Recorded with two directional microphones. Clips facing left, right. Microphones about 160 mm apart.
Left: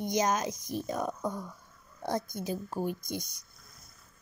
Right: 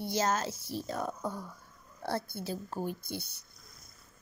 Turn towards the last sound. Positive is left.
turn(degrees=15)  # may be behind; listen again after turning